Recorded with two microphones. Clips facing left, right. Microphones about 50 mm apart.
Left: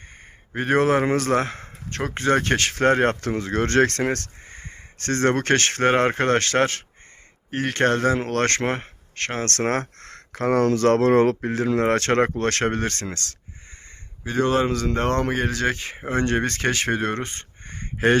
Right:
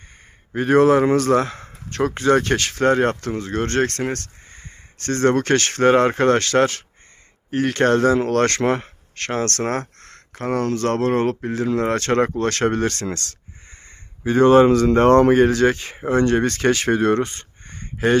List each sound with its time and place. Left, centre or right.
0.5 s a man's voice: left
2.6 s speech: left
5.3 s speech: left
9.4 s speech: left
10.0 s speech: left
12.4 s speech: left
12.6 s speech: left
14.3 s speech: right
15.6 s speech: centre
17.6 s a sound: left